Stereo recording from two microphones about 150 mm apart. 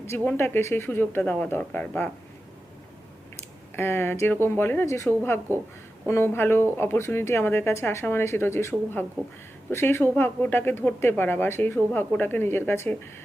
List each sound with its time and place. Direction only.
0.3 s speech: 15° left (ahead or behind)
3.8 s speech: 15° left (ahead or behind)